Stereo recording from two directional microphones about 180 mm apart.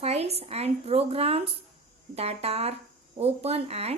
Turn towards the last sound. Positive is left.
turn(degrees=-35)  # may be behind; listen again after turning